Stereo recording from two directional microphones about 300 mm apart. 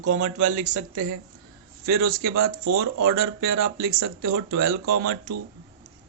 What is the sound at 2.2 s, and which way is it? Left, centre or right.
Speech, right.